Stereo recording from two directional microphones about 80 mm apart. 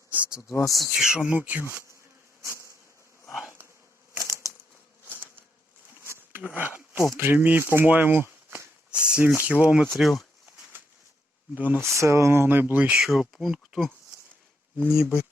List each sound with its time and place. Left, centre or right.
0.4 s speech: left
0.8 s speech: centre
1.2 s speech: centre
2.4 s bee: right
4.1 s a sound: right
6.0 s a sound: right
7.2 s speech: right
9.0 s speech: centre
9.9 s speech: centre
11.5 s speech: right
11.9 s speech: right; by 13.0 s centre
13.0 s speech: centre
14.8 s speech: centre